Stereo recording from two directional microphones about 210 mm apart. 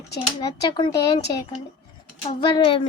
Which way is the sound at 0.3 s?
20° left (ahead or behind).